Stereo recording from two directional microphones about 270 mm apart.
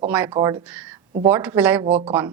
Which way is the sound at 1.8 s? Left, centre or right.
Right.